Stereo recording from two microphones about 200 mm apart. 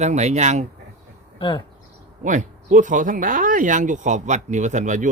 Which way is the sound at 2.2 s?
40° right (ahead or behind).